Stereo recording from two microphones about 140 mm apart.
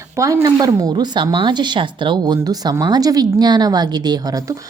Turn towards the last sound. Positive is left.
turn(degrees=-25)  # may be behind; listen again after turning